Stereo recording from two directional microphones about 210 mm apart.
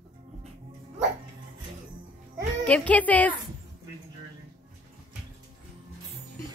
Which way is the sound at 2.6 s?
5° left (ahead or behind).